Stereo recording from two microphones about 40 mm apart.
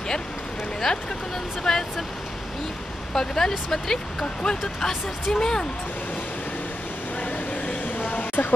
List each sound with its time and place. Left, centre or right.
1.6 s speech: centre
3.2 s speech: centre
4.4 s speech: left
7.2 s a sound: left